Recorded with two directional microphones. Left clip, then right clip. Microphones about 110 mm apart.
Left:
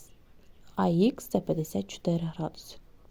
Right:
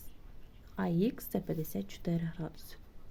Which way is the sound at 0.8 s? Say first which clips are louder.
Left 8 dB; 50° left (ahead or behind).